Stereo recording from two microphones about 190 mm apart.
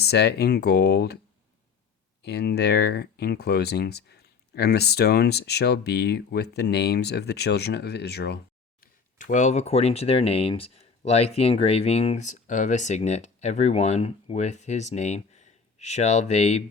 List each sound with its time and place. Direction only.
0.0 s speech: 60° left (ahead or behind)
2.2 s speech: 60° left (ahead or behind)
8.8 s speech: 40° left (ahead or behind)